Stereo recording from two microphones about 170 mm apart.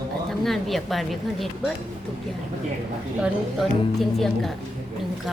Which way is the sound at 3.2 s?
Centre (ahead or behind).